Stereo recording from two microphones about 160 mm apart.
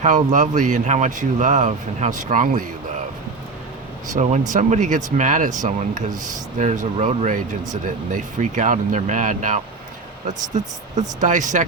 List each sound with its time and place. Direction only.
0.0 s speech: 50° right (ahead or behind)
4.1 s speech: 50° right (ahead or behind)